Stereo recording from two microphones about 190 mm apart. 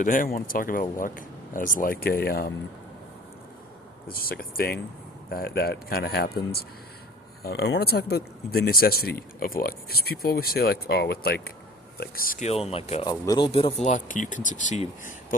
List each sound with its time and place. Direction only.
0.0 s speech: 45° left (ahead or behind)
4.1 s speech: 50° left (ahead or behind)
12.5 s speech: 30° left (ahead or behind)